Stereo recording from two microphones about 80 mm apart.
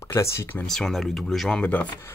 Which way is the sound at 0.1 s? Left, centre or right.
Left.